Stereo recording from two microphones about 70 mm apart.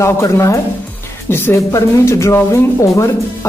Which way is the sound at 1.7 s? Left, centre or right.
Left.